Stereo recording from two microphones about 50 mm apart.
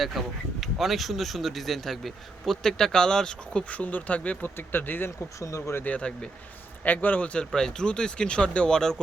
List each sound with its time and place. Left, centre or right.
0.0 s speech: centre
3.7 s speech: left
4.5 s speech: left
5.4 s speech: left
5.8 s a man's voice: left
7.3 s speech: centre